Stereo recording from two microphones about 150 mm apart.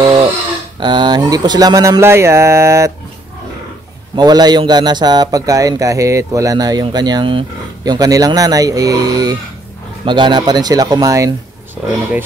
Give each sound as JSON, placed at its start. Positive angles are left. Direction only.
{"t": 0.7, "sound": "a man's voice", "side_deg": -30}
{"t": 4.1, "sound": "a man's voice", "side_deg": -25}